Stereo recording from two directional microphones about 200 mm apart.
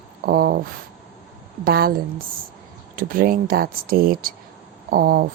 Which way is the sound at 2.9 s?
45° right (ahead or behind).